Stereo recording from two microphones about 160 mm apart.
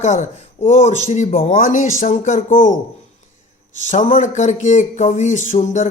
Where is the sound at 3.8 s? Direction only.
50° left (ahead or behind).